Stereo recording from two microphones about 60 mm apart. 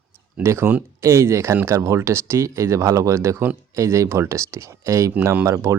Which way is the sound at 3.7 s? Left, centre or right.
Right.